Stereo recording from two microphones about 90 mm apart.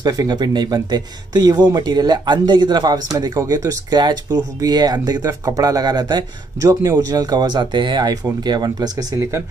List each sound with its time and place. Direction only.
0.0 s speech: 45° right (ahead or behind)